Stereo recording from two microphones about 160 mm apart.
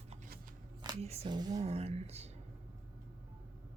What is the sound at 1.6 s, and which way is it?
Speech, 40° right (ahead or behind).